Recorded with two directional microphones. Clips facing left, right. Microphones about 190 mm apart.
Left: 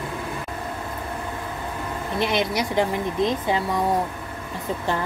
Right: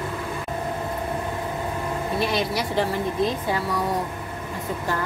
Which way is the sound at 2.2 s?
20° left (ahead or behind).